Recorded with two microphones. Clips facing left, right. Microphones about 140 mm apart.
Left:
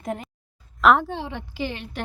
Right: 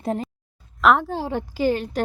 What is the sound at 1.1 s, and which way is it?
Speech, 40° right (ahead or behind).